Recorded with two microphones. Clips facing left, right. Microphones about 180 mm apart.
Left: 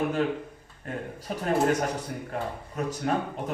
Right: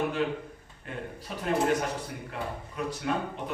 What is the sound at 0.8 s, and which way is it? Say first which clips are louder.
A man's voice: left 4 dB; 45° left (ahead or behind).